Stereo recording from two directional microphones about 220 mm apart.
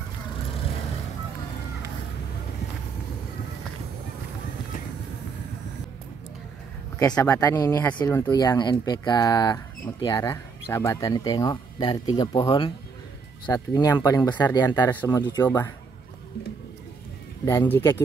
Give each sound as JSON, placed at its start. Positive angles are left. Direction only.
{"t": 7.1, "sound": "speech", "side_deg": 5}
{"t": 17.5, "sound": "speech", "side_deg": 15}